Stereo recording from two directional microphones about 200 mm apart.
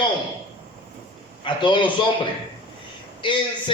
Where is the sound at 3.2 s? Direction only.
25° left (ahead or behind).